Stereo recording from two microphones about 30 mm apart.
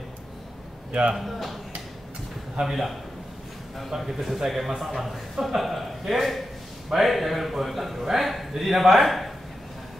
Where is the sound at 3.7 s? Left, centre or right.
Centre.